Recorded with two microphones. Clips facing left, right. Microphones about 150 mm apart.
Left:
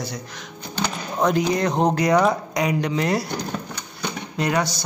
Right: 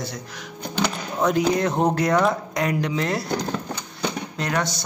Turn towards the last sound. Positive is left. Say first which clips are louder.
# left 3 dB
turn(degrees=5)  # may be behind; listen again after turning